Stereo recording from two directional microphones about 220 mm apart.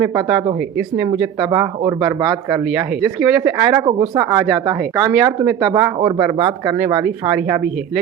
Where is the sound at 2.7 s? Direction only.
Centre (ahead or behind).